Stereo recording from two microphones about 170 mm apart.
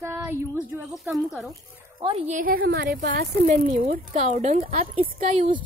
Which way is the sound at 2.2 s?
55° right (ahead or behind).